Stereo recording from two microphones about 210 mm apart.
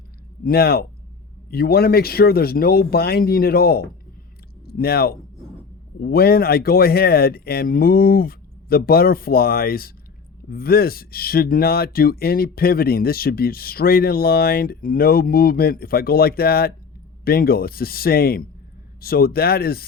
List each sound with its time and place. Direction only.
0.4 s speech: 45° left (ahead or behind)